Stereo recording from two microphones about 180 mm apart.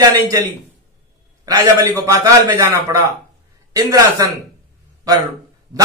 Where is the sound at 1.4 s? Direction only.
20° right (ahead or behind).